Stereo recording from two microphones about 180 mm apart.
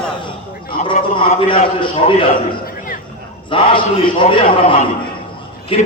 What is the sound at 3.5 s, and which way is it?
A man's voice, 30° left (ahead or behind).